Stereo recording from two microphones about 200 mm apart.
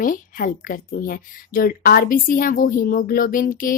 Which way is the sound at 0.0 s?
45° left (ahead or behind).